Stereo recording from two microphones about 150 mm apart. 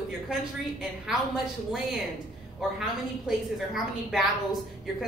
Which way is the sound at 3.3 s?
Centre (ahead or behind).